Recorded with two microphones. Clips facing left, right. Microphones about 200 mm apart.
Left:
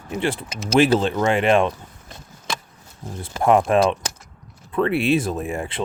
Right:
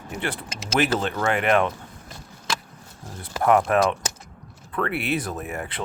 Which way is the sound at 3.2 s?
25° left (ahead or behind).